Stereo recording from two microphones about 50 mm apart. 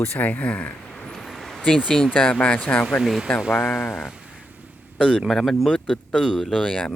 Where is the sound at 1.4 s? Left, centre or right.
Centre.